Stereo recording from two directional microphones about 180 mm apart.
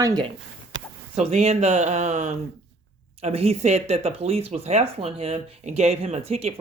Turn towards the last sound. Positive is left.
turn(degrees=-35)  # may be behind; listen again after turning